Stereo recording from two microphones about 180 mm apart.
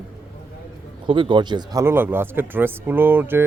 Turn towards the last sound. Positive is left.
turn(degrees=-10)  # may be behind; listen again after turning